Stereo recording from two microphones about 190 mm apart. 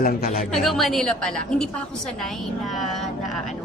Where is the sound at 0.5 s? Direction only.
Centre (ahead or behind).